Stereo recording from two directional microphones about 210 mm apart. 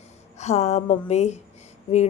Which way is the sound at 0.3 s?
30° left (ahead or behind).